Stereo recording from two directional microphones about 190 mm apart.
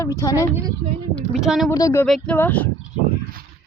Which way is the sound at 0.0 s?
15° left (ahead or behind).